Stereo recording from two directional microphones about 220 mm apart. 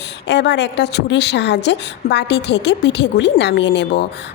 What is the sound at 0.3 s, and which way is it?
A woman's voice, 50° left (ahead or behind).